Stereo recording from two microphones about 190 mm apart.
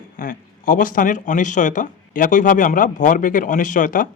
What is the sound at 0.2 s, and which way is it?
Speech, 45° left (ahead or behind).